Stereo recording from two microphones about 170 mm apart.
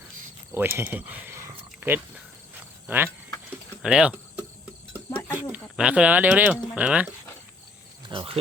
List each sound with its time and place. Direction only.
0.5 s speech: 15° right (ahead or behind)
5.7 s speech: 5° right (ahead or behind)
8.0 s speech: 30° right (ahead or behind)